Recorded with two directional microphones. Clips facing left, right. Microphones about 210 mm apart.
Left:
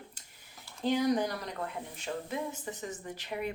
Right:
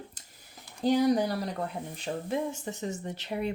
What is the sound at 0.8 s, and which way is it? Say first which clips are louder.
Speech: right 4 dB; 35° right (ahead or behind).